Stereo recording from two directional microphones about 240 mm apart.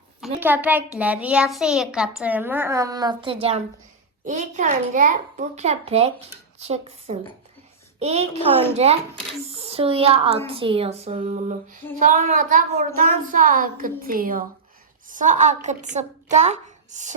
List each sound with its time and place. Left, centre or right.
0.3 s a child's voice: centre
4.3 s speech: right